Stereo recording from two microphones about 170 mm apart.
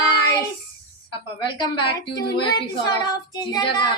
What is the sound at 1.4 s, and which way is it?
A woman's voice, 30° left (ahead or behind).